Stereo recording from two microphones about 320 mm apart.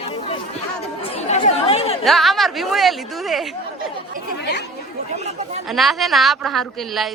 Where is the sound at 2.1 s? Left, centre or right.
Centre.